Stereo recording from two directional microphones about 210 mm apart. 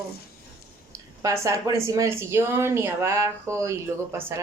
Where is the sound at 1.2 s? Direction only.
15° right (ahead or behind).